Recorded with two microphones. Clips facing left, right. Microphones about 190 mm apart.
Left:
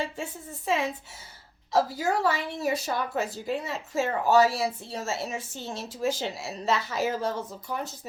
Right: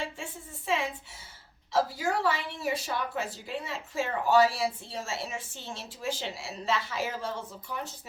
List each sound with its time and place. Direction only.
0.0 s a woman's voice: 40° left (ahead or behind)